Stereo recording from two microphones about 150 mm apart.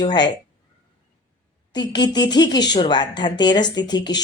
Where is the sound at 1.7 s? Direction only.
30° left (ahead or behind).